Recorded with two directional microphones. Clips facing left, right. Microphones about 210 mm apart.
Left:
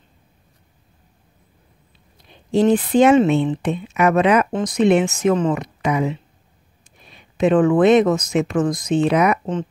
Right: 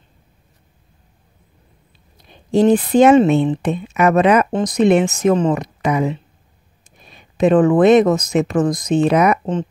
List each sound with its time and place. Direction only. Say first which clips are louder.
2.5 s speech: right 2 dB; 40° right (ahead or behind)